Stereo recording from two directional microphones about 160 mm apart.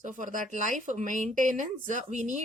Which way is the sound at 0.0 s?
55° right (ahead or behind).